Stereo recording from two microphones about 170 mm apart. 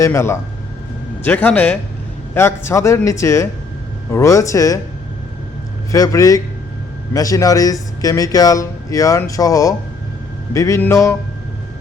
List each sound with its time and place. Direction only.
0.0 s a man's voice: 15° left (ahead or behind)
5.9 s a man's voice: 20° left (ahead or behind)